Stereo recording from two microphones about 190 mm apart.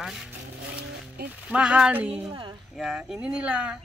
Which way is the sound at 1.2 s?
55° right (ahead or behind).